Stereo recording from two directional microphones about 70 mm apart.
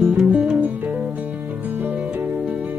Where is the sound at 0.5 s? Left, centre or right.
Right.